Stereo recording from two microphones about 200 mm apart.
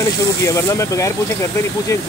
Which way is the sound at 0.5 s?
15° left (ahead or behind).